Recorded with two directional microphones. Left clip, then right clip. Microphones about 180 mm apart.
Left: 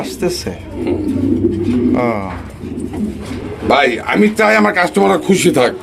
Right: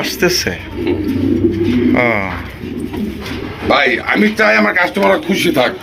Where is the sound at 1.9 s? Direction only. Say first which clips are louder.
Right 4 dB; 10° left (ahead or behind).